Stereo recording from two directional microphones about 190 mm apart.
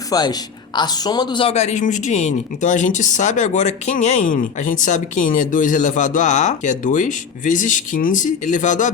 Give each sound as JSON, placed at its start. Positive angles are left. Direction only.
{"t": 0.1, "sound": "a woman's voice", "side_deg": 20}